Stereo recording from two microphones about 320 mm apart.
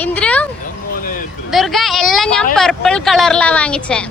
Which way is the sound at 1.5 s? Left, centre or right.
Centre.